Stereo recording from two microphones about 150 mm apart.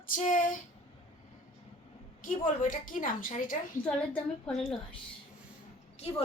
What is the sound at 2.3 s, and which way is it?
A woman's voice, 60° left (ahead or behind).